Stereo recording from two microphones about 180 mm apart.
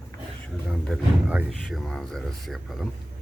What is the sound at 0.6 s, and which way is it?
Speech, centre (ahead or behind).